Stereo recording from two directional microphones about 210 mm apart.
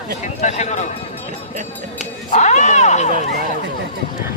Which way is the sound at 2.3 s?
35° left (ahead or behind).